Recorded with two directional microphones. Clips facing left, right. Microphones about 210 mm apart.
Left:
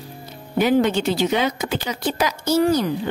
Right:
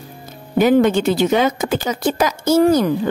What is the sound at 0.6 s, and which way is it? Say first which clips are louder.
A woman's voice: right 4 dB; 50° right (ahead or behind).